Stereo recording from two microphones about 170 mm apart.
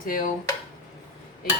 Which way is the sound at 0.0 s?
55° left (ahead or behind).